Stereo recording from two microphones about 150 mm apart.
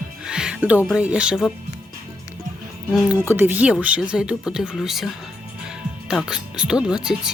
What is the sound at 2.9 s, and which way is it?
Speech, 10° right (ahead or behind).